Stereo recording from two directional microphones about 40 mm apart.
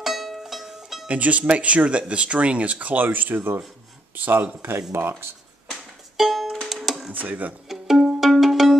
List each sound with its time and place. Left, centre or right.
0.0 s music: centre
1.0 s speech: right
4.6 s speech: right
6.1 s music: centre
7.1 s speech: right
7.6 s music: centre